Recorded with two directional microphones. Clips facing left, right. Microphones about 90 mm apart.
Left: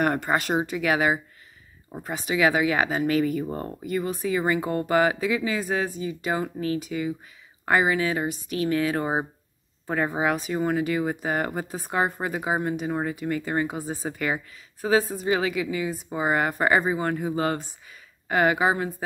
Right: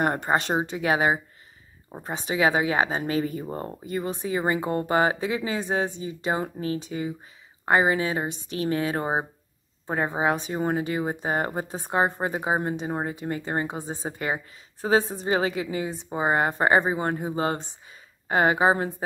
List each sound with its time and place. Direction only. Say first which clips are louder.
0.0 s speech: even; 25° right (ahead or behind)